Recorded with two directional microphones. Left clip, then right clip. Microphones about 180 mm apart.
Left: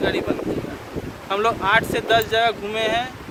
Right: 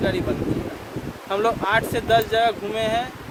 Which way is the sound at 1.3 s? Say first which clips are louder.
Left 2 dB; 25° right (ahead or behind).